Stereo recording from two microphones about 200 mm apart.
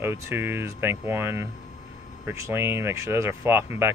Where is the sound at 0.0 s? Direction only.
10° right (ahead or behind).